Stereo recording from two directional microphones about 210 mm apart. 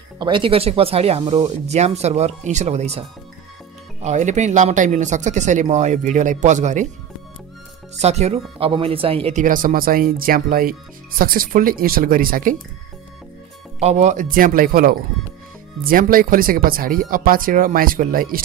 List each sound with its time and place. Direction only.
0.2 s speech: 25° right (ahead or behind)
8.0 s speech: 30° right (ahead or behind)
13.7 s speech: 30° right (ahead or behind)